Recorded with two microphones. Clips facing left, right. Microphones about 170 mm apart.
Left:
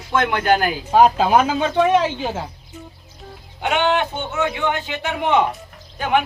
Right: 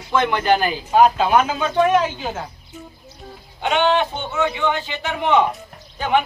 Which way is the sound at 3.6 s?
10° left (ahead or behind).